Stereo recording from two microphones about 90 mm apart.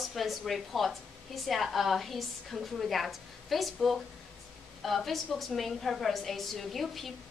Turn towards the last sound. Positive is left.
turn(degrees=0)  # may be behind; listen again after turning